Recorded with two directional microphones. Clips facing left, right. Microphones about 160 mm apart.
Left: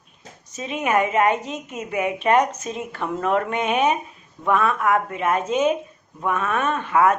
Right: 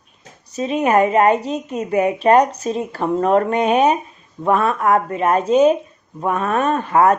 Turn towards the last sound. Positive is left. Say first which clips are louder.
# right 4 dB
turn(degrees=-35)  # may be behind; listen again after turning